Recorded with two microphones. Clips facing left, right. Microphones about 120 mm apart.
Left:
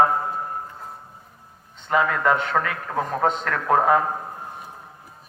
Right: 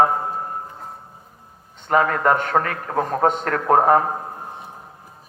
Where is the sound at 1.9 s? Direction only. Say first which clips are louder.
Right 3 dB; 40° right (ahead or behind).